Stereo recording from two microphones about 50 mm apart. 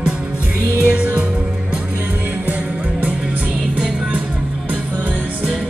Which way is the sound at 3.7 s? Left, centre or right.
Right.